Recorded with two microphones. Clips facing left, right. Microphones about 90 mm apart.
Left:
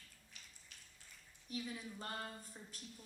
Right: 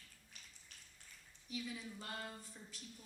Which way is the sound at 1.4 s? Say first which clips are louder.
Left 1 dB; 40° left (ahead or behind).